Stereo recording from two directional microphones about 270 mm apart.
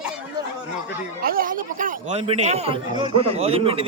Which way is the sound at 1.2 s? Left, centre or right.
Right.